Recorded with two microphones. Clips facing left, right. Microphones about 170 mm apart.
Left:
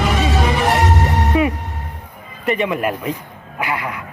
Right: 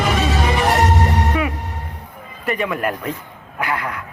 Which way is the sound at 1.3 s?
20° left (ahead or behind).